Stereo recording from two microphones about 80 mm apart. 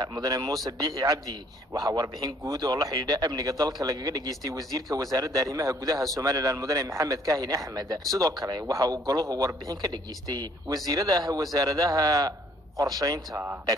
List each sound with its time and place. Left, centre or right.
0.0 s a man's voice: right